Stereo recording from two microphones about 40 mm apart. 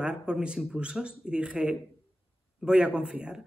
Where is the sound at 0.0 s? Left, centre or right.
Right.